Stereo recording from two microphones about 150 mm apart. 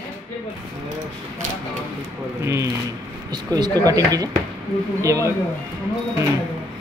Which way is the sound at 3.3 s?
30° right (ahead or behind).